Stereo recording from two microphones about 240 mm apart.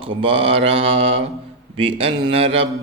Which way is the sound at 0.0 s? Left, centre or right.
Right.